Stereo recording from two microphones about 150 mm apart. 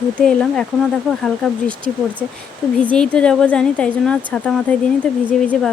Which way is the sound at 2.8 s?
5° left (ahead or behind).